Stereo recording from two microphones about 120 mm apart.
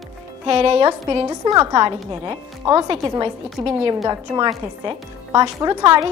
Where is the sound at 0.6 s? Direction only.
55° right (ahead or behind).